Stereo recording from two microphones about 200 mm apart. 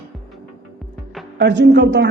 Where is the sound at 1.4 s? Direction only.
60° right (ahead or behind).